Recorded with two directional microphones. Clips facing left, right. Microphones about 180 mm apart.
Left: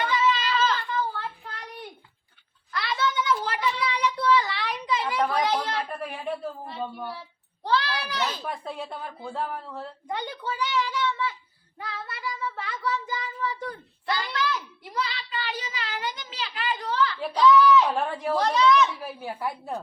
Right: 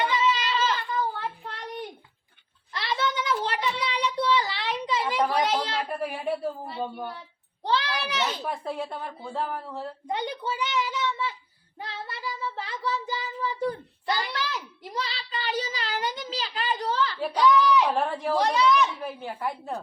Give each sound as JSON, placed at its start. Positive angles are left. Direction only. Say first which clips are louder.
{"t": 0.0, "sound": "a sound", "louder": "even", "side_deg": -25}
{"t": 2.7, "sound": "a sound", "louder": "left 1 dB", "side_deg": -25}
{"t": 5.9, "sound": "speech", "louder": "right 3 dB", "side_deg": -5}
{"t": 7.7, "sound": "a child's voice", "louder": "left 1 dB", "side_deg": -20}
{"t": 8.4, "sound": "speech", "louder": "right 2 dB", "side_deg": 0}
{"t": 10.1, "sound": "a child's voice", "louder": "right 2 dB", "side_deg": -20}
{"t": 11.8, "sound": "child singing", "louder": "even", "side_deg": -25}
{"t": 17.2, "sound": "a sound", "louder": "left 3 dB", "side_deg": -15}
{"t": 18.3, "sound": "speech", "louder": "left 1 dB", "side_deg": -10}
{"t": 18.9, "sound": "speech", "louder": "even", "side_deg": 5}